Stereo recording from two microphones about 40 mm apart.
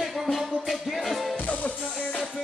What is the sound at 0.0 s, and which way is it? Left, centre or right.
Music, centre.